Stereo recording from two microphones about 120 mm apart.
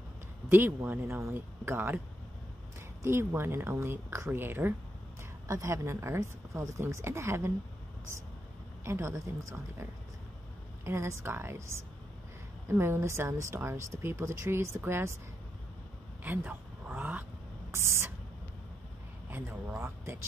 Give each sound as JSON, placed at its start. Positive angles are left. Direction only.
{"t": 0.5, "sound": "speech", "side_deg": -20}
{"t": 3.0, "sound": "speech", "side_deg": -20}
{"t": 8.8, "sound": "speech", "side_deg": -25}
{"t": 16.3, "sound": "vehicle", "side_deg": -15}
{"t": 17.6, "sound": "speech", "side_deg": -20}